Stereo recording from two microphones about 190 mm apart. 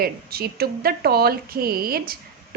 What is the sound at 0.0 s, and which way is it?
Speech, 55° right (ahead or behind).